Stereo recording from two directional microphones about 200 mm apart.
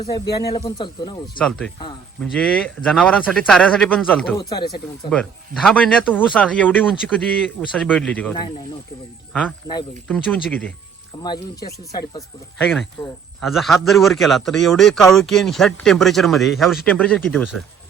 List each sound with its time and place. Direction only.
0.5 s speech: 20° left (ahead or behind)
1.4 s a man's voice: 5° left (ahead or behind)
4.4 s speech: 20° left (ahead or behind)
5.1 s speech: 5° left (ahead or behind)
11.2 s speech: 20° left (ahead or behind)
13.4 s a man's voice: centre (ahead or behind)